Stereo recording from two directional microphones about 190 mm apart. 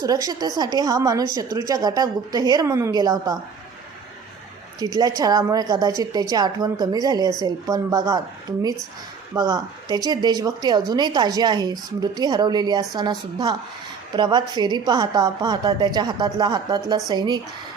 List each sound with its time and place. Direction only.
0.0 s a woman's voice: 20° right (ahead or behind)
4.8 s a woman's voice: 20° right (ahead or behind)
9.3 s a woman's voice: 20° right (ahead or behind)